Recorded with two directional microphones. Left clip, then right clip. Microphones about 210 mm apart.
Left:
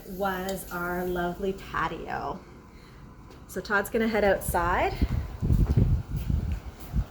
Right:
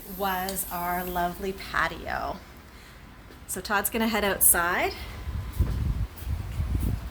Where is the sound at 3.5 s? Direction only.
15° right (ahead or behind); by 4.9 s 30° right (ahead or behind).